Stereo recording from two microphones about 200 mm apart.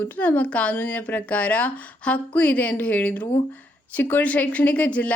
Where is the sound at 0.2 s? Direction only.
5° left (ahead or behind).